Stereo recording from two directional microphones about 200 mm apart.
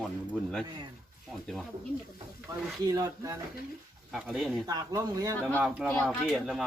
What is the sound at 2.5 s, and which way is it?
Speech, 20° right (ahead or behind).